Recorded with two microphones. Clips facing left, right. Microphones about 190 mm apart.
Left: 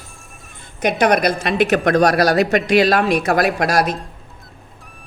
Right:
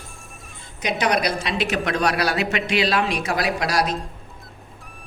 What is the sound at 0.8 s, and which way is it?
Speech, 55° left (ahead or behind).